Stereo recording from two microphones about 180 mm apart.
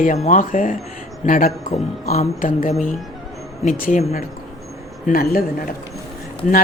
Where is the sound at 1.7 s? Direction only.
40° left (ahead or behind).